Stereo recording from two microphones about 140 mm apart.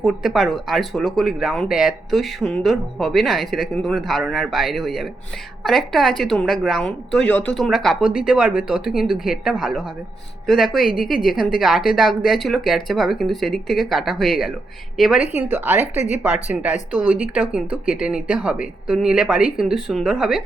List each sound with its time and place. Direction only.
0.0 s a woman's voice: 5° right (ahead or behind)
15.2 s speech: 15° right (ahead or behind)